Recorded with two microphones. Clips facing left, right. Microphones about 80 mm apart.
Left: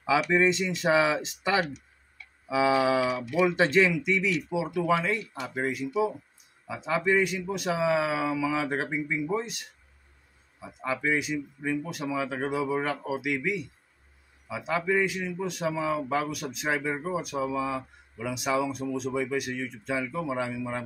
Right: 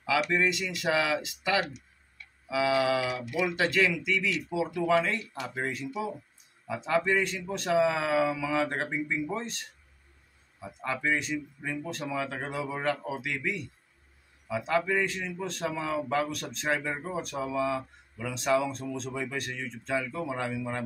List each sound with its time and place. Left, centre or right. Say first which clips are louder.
0.3 s a man's voice: left 4 dB; left; by 9.7 s centre
10.8 s a man's voice: left 2 dB; centre